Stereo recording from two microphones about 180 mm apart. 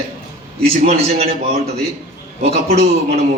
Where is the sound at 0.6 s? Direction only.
35° right (ahead or behind).